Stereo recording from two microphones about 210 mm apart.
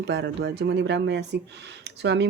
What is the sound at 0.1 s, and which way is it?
Speech, 50° right (ahead or behind).